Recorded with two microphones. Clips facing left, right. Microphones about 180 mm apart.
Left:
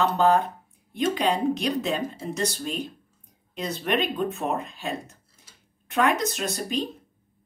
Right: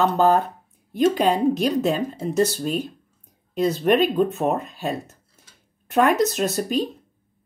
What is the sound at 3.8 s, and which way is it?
Speech, 40° right (ahead or behind).